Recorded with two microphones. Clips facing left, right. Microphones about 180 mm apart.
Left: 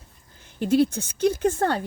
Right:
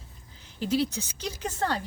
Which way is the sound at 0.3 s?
55° left (ahead or behind).